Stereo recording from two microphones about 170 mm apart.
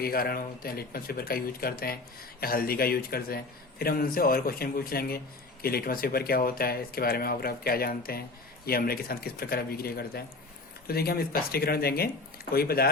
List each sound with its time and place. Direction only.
0.0 s a man's voice: 60° left (ahead or behind)